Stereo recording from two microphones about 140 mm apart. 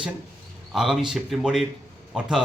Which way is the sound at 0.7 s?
Centre (ahead or behind).